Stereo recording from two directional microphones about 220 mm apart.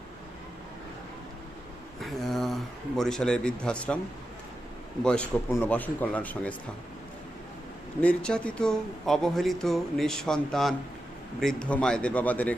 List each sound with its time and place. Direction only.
2.0 s speech: centre (ahead or behind)
5.0 s speech: 5° left (ahead or behind)
8.0 s speech: 5° left (ahead or behind)